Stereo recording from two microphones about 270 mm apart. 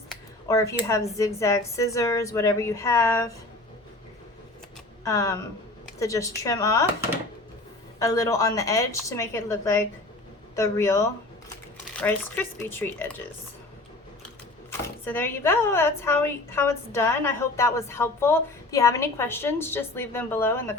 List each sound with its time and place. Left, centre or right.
0.4 s speech: centre
5.0 s speech: centre
7.9 s speech: centre
14.7 s speech: centre